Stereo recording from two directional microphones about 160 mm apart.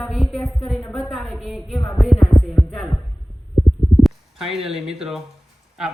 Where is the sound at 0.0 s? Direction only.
Centre (ahead or behind).